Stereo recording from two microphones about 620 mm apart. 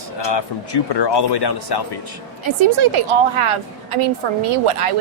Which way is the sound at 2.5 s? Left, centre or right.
Right.